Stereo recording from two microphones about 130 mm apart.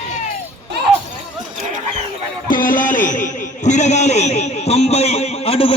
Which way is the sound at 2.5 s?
90° left.